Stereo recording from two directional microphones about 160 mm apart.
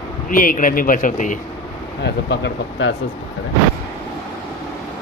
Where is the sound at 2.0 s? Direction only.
90° left.